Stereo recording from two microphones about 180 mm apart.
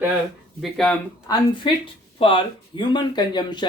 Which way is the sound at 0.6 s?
Centre (ahead or behind).